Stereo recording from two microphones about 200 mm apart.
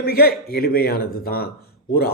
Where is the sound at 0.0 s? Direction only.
50° left (ahead or behind).